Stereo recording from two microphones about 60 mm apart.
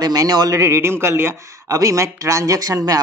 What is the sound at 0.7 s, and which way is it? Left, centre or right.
Speech, right.